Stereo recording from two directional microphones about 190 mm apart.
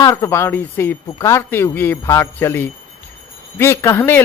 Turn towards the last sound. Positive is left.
turn(degrees=10)  # may be behind; listen again after turning